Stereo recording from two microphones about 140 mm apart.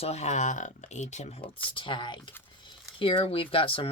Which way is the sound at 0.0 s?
50° left (ahead or behind).